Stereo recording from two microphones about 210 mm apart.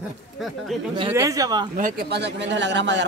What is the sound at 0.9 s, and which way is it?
Speech, 20° right (ahead or behind).